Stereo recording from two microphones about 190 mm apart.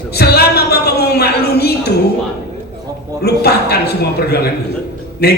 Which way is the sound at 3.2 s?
55° left (ahead or behind).